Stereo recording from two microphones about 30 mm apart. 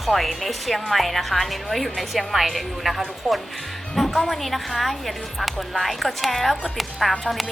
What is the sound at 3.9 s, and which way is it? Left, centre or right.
Music, centre.